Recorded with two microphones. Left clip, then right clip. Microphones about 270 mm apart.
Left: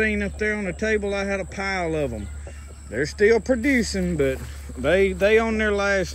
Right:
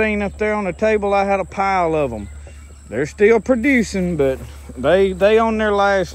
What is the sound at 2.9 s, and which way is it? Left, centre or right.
Speech, right.